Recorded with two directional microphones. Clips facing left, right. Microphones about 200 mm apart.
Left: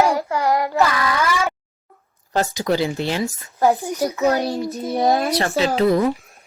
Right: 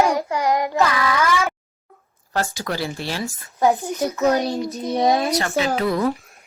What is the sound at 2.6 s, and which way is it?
Speech, 20° left (ahead or behind).